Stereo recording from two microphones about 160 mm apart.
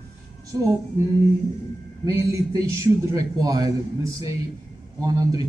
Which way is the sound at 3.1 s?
25° right (ahead or behind).